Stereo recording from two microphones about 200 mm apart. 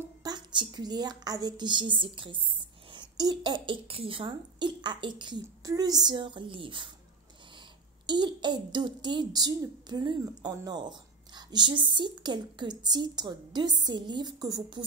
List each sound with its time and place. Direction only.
0.2 s a woman's voice: 20° right (ahead or behind)
8.1 s a woman's voice: 20° right (ahead or behind)